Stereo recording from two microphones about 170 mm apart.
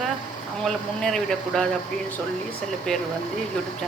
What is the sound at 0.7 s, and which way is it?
Speech, centre (ahead or behind).